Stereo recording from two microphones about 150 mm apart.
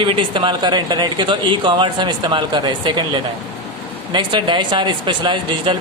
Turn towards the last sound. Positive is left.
turn(degrees=-35)  # may be behind; listen again after turning